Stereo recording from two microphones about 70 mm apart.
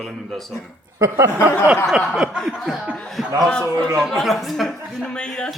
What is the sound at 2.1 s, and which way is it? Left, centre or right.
Snicker, centre.